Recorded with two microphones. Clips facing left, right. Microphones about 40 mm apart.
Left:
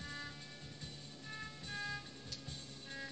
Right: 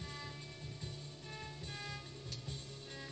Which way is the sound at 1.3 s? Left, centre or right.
Centre.